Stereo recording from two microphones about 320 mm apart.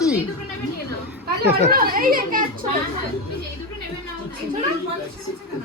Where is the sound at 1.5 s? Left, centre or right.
Right.